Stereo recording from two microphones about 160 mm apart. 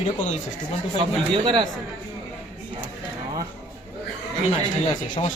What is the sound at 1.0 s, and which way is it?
Speech, 30° right (ahead or behind).